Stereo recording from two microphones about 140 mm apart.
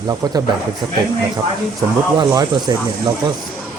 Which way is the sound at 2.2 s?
30° right (ahead or behind).